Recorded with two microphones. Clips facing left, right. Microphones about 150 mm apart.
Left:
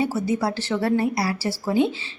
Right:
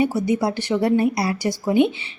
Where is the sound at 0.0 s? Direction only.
15° right (ahead or behind).